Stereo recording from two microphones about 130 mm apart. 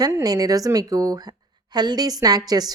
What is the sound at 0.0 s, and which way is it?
Speech, 30° right (ahead or behind).